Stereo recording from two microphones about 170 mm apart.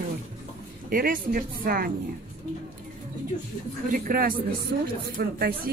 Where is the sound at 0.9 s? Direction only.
55° right (ahead or behind).